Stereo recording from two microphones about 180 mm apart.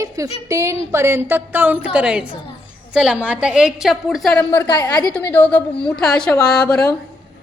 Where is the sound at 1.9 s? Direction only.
5° right (ahead or behind).